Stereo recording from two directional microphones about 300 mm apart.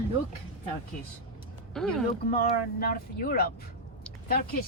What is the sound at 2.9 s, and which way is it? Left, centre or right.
Speech, left.